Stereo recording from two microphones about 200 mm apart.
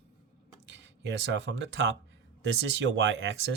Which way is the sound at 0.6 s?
60° right (ahead or behind).